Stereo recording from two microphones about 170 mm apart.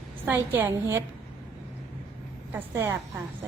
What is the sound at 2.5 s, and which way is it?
Speech, 15° right (ahead or behind).